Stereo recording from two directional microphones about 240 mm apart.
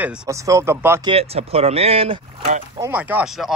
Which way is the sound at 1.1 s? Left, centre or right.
Right.